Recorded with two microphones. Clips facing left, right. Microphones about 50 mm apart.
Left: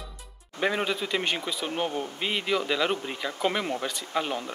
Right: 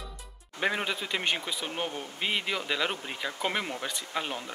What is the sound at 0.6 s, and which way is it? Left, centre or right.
Speech, centre.